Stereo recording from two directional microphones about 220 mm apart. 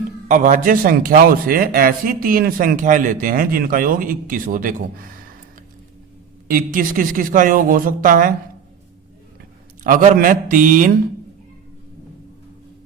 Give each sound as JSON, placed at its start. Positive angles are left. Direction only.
{"t": 0.3, "sound": "a man's voice", "side_deg": -35}
{"t": 6.5, "sound": "a man's voice", "side_deg": -40}
{"t": 9.8, "sound": "a man's voice", "side_deg": -35}